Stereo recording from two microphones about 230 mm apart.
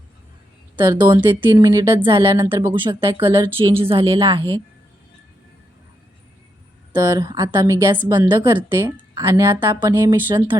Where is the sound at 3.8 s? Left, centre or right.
Right.